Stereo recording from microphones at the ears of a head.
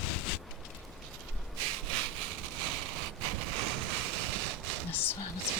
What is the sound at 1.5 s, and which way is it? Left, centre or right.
Sawing, right.